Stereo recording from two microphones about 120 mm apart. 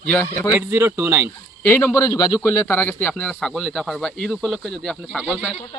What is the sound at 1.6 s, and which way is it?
A man's voice, 20° left (ahead or behind).